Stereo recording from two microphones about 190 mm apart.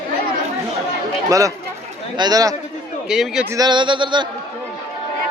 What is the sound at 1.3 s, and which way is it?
Speech, 15° right (ahead or behind).